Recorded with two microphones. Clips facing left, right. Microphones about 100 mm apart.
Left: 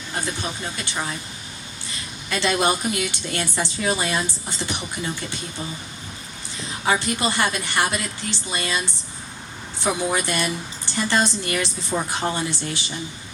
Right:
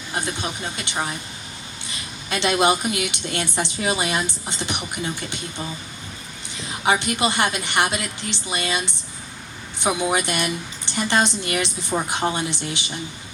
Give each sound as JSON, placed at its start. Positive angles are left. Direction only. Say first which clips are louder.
{"t": 0.1, "sound": "a woman's voice", "louder": "right 1 dB", "side_deg": -20}
{"t": 2.3, "sound": "a woman's voice", "louder": "right 2 dB", "side_deg": -20}
{"t": 6.8, "sound": "a woman's voice", "louder": "right 2 dB", "side_deg": -20}
{"t": 10.0, "sound": "a woman's voice", "louder": "right 1 dB", "side_deg": -20}